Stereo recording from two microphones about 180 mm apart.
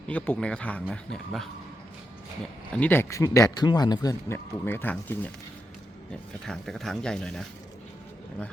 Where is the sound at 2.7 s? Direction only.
10° left (ahead or behind).